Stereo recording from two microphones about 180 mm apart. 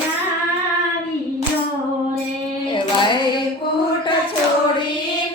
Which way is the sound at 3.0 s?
25° left (ahead or behind).